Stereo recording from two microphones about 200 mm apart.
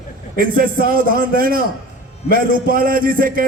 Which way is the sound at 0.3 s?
45° right (ahead or behind).